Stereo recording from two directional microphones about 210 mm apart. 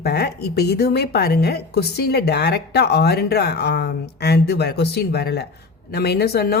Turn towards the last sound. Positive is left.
turn(degrees=50)  # may be behind; listen again after turning